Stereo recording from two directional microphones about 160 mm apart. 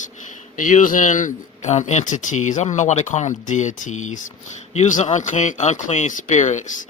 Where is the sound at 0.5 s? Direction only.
55° left (ahead or behind).